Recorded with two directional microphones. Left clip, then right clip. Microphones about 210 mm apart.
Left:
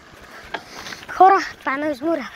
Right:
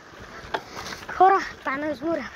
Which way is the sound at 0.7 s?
65° left (ahead or behind).